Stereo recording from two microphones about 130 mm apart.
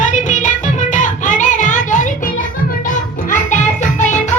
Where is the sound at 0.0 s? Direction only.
75° left (ahead or behind).